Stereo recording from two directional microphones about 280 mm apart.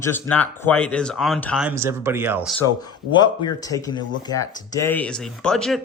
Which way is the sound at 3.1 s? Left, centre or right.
Centre.